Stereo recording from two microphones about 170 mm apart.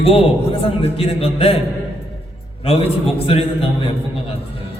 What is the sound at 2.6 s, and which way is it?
A man's voice, 35° left (ahead or behind).